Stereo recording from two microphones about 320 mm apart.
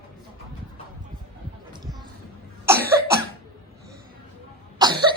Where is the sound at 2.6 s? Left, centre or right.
Centre.